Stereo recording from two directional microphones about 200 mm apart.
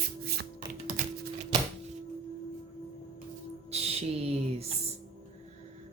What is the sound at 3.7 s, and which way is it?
Speech, 30° right (ahead or behind).